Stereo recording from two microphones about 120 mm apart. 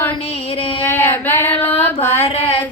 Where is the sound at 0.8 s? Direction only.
15° left (ahead or behind).